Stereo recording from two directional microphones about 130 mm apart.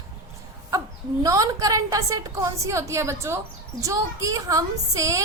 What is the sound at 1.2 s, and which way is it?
A woman's voice, 25° right (ahead or behind).